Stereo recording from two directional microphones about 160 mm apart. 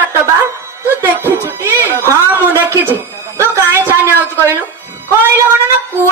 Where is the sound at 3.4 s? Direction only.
15° right (ahead or behind).